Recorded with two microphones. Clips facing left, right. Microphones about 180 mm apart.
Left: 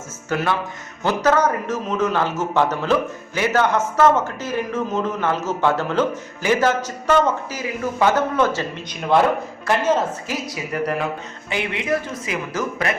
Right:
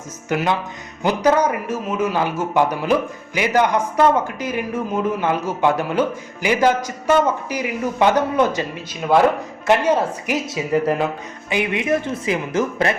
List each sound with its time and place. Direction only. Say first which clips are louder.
0.3 s a man's voice: right 1 dB; 15° right (ahead or behind)
9.6 s a man's voice: right 3 dB; 15° right (ahead or behind)
10.4 s speech: right 6 dB; 25° right (ahead or behind)